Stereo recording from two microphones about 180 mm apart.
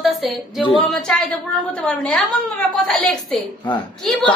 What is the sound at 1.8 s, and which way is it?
A woman's voice, 5° left (ahead or behind).